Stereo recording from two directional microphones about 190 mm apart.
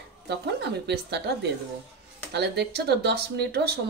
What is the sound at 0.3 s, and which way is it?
Speech, 60° right (ahead or behind).